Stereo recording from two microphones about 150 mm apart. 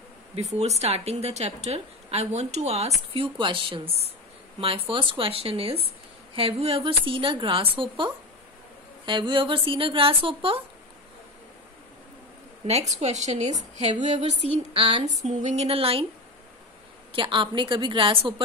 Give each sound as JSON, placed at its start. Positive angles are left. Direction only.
{"t": 0.4, "sound": "a woman's voice", "side_deg": -45}
{"t": 12.9, "sound": "a woman's voice", "side_deg": -50}
{"t": 15.2, "sound": "a woman's voice", "side_deg": -45}
{"t": 17.1, "sound": "a woman's voice", "side_deg": -35}